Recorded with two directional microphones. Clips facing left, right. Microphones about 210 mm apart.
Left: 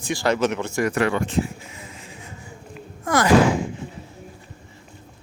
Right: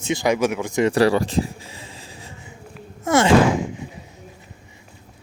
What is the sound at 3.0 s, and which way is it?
Speech, 25° right (ahead or behind).